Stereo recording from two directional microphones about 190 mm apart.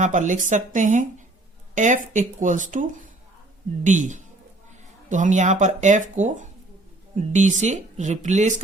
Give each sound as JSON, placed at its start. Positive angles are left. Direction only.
{"t": 0.0, "sound": "speech", "side_deg": -40}